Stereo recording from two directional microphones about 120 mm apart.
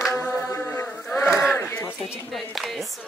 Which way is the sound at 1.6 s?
20° left (ahead or behind).